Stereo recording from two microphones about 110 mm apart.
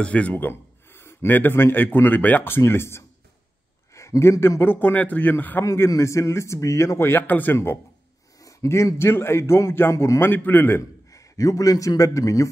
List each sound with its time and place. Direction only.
0.0 s a man's voice: 10° left (ahead or behind); by 12.4 s 30° left (ahead or behind)